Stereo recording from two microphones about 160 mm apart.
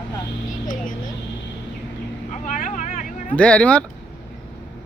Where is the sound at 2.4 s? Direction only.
50° left (ahead or behind).